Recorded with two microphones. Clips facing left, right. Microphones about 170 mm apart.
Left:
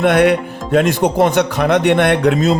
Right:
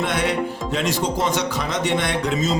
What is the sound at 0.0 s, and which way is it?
Speech, 60° left (ahead or behind).